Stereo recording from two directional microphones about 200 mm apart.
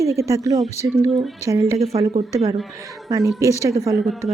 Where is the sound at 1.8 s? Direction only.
30° right (ahead or behind).